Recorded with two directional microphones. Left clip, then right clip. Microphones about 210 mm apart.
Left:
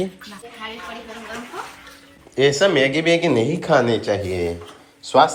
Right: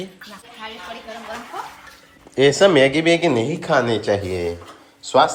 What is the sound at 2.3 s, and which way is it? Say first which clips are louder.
Speech: right 3 dB; 25° right (ahead or behind).